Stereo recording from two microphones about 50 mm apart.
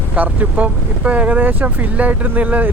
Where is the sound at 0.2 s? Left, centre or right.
Right.